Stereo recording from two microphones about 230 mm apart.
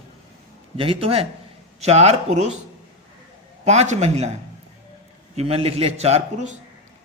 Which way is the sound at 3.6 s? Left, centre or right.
Right.